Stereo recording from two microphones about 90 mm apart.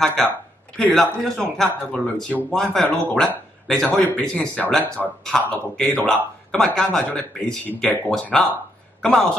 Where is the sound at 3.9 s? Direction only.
20° left (ahead or behind).